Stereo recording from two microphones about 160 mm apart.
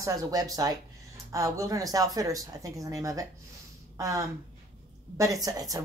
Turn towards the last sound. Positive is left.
turn(degrees=-20)  # may be behind; listen again after turning